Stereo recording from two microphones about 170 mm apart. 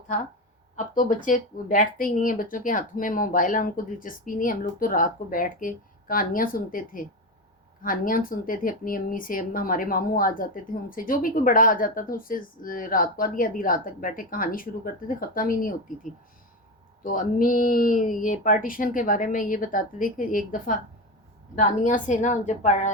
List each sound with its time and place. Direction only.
0.8 s speech: 50° left (ahead or behind)
17.0 s speech: 50° left (ahead or behind)